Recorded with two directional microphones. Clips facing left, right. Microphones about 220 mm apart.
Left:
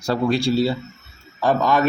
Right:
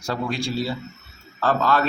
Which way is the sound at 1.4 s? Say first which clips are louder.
Left 3 dB; 15° left (ahead or behind).